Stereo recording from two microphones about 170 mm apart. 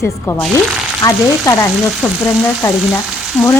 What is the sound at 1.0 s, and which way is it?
Frying, 20° left (ahead or behind).